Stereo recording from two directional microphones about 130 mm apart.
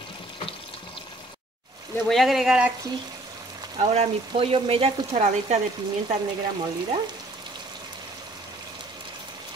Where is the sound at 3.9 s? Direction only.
50° right (ahead or behind).